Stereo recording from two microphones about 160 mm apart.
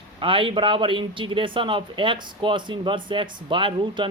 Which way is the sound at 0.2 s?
30° right (ahead or behind).